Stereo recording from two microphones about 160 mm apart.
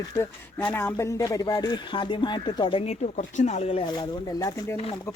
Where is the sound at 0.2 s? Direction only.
15° left (ahead or behind); by 3.8 s 40° left (ahead or behind).